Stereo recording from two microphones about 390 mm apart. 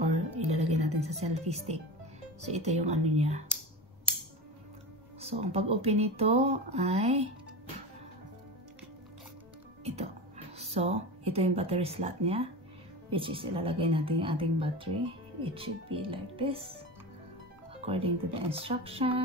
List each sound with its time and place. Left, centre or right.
0.6 s music: centre
2.5 s a woman's voice: centre
5.2 s a woman's voice: centre
10.6 s a woman's voice: centre
17.7 s a woman's voice: centre